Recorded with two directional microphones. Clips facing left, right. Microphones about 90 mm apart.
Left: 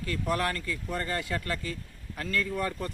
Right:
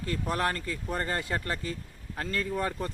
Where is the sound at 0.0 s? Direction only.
35° right (ahead or behind).